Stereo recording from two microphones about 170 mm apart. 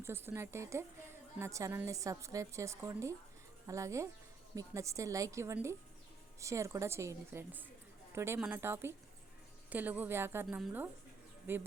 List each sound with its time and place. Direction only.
0.0 s a woman's voice: 15° right (ahead or behind)